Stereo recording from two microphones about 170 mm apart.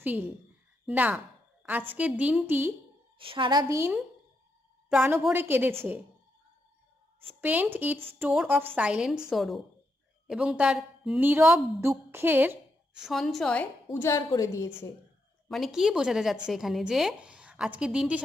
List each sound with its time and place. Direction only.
0.0 s a woman's voice: 10° right (ahead or behind)
3.2 s a woman's voice: 30° right (ahead or behind); by 6.0 s 10° right (ahead or behind)
7.3 s a woman's voice: 10° right (ahead or behind)
13.0 s a woman's voice: centre (ahead or behind)
13.8 s a woman's voice: 15° left (ahead or behind)
15.4 s a woman's voice: centre (ahead or behind)